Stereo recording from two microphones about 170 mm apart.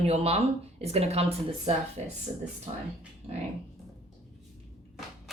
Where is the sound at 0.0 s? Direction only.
35° right (ahead or behind).